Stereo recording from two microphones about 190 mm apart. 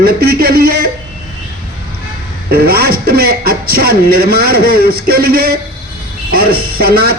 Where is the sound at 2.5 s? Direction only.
55° right (ahead or behind).